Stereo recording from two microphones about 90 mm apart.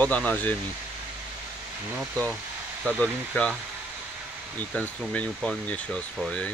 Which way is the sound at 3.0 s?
10° left (ahead or behind).